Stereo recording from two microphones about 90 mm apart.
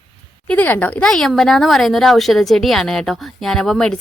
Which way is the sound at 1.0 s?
5° left (ahead or behind).